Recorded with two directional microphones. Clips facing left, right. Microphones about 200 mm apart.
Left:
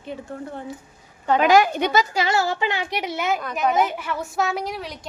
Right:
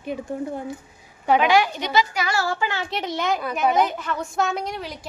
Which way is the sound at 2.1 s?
25° left (ahead or behind).